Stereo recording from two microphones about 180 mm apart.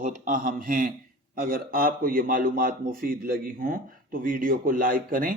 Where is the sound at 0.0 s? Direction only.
50° right (ahead or behind).